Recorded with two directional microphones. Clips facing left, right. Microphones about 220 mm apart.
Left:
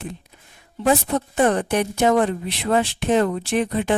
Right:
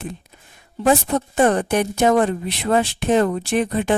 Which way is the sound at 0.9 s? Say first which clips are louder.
Right 2 dB; 45° right (ahead or behind).